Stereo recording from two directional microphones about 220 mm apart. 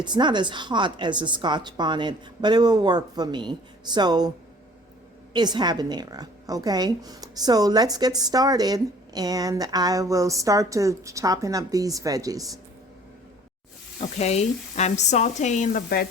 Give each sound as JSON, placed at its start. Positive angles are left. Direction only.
{"t": 0.0, "sound": "a woman's voice", "side_deg": -20}
{"t": 5.3, "sound": "a woman's voice", "side_deg": -20}
{"t": 14.2, "sound": "speech", "side_deg": 30}